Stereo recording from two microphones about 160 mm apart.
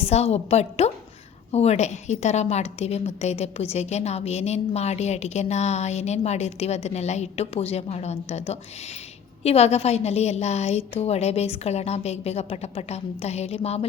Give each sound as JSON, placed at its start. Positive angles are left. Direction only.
{"t": 0.0, "sound": "a woman's voice", "side_deg": 40}